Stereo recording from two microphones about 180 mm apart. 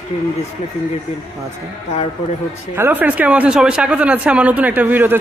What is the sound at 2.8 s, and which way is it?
Speech, 10° right (ahead or behind).